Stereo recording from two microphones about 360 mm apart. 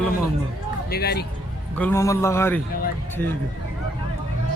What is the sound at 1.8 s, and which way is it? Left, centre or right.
Speech, centre.